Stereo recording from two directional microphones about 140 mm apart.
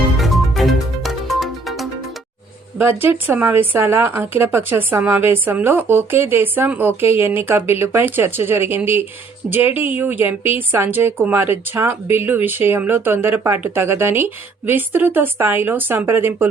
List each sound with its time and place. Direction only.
0.2 s music: centre (ahead or behind)
2.7 s speech: 15° right (ahead or behind)